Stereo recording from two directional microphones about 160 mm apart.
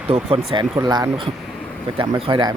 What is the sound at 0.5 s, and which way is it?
Speech, 25° right (ahead or behind).